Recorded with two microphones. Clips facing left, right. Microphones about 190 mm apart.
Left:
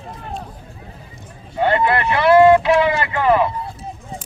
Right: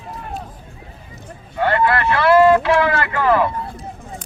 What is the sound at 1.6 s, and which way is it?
Boat, 20° left (ahead or behind).